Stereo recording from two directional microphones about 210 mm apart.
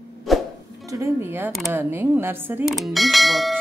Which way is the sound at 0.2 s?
Centre (ahead or behind).